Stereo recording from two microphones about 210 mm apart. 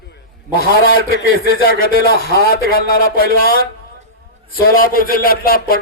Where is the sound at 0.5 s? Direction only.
45° left (ahead or behind).